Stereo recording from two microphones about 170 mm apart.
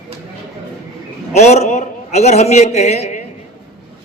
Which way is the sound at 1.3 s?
40° left (ahead or behind).